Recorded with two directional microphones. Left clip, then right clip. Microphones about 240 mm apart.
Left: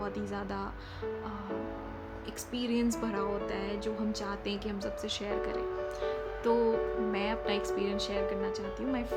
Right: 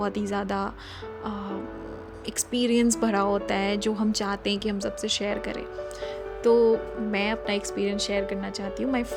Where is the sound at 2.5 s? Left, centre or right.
Right.